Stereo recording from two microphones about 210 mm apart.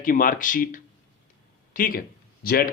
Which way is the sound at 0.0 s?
40° left (ahead or behind).